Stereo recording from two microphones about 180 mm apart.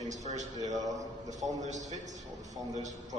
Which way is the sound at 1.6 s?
40° right (ahead or behind).